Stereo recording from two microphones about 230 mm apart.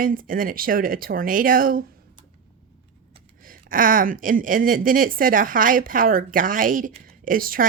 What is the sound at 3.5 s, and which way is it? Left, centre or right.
Speech, right.